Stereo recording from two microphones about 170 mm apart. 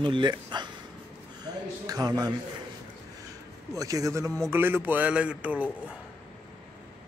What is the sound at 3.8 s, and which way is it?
Speech, 20° right (ahead or behind).